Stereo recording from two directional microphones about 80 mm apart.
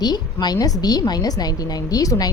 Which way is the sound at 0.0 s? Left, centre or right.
Left.